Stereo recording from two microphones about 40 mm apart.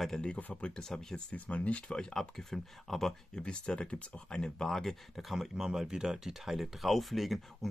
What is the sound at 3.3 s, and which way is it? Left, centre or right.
Speech, left.